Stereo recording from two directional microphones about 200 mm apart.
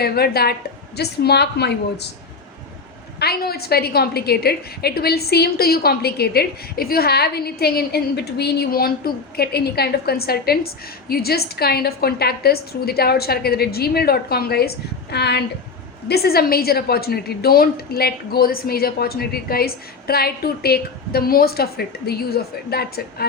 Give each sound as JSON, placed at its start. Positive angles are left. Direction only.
{"t": 0.0, "sound": "a woman's voice", "side_deg": 50}
{"t": 3.2, "sound": "a woman's voice", "side_deg": 50}